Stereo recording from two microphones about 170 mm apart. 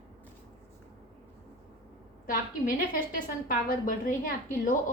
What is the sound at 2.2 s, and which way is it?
A woman's voice, 55° left (ahead or behind).